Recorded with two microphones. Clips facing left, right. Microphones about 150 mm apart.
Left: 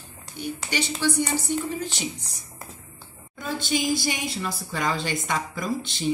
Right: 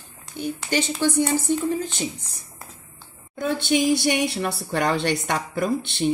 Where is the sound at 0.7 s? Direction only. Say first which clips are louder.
Right 3 dB; 50° right (ahead or behind).